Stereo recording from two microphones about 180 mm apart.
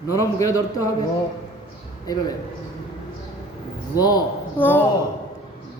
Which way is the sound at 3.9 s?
20° left (ahead or behind).